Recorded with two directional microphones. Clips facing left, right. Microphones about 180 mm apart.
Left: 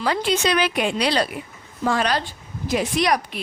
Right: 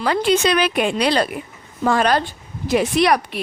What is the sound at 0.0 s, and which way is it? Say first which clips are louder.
A woman's voice: right 4 dB; 60° right (ahead or behind).